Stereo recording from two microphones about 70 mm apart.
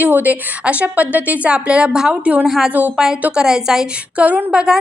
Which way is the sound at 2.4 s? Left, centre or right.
Centre.